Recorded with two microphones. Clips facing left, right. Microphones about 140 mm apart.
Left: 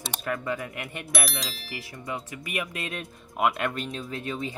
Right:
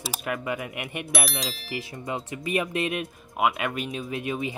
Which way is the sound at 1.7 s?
25° right (ahead or behind).